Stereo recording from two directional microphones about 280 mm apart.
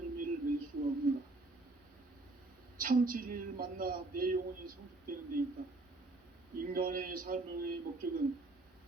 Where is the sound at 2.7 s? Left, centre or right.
Right.